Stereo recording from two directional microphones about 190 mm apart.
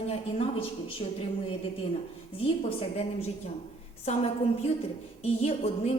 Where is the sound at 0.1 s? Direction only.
30° left (ahead or behind).